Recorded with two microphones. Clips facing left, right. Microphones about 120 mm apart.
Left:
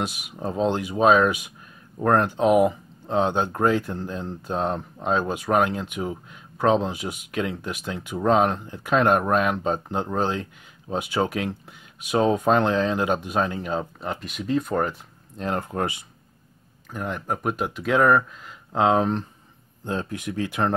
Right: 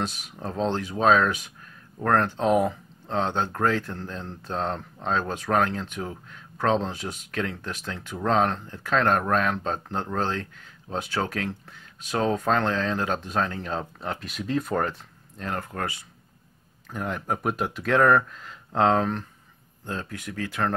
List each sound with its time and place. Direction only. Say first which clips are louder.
0.0 s speech: left 3 dB; 10° left (ahead or behind)
15.3 s speech: left 5 dB; 20° left (ahead or behind)
16.9 s speech: left 1 dB; centre (ahead or behind)
19.8 s speech: left 5 dB; 20° left (ahead or behind)